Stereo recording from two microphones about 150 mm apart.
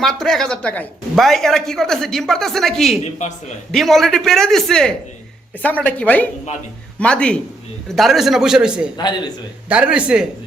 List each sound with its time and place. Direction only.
0.0 s speech: 5° left (ahead or behind)
3.0 s speech: 50° left (ahead or behind)
3.7 s speech: centre (ahead or behind)